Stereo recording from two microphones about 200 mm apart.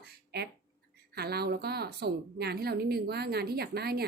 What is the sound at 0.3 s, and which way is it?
A woman's voice, 55° right (ahead or behind).